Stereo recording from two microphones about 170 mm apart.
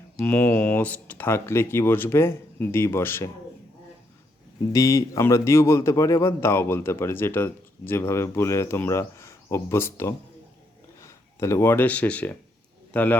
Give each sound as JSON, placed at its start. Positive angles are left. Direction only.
{"t": 0.2, "sound": "speech", "side_deg": 10}
{"t": 4.7, "sound": "speech", "side_deg": 20}